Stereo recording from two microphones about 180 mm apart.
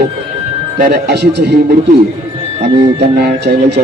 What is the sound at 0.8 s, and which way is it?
Speech, 60° right (ahead or behind).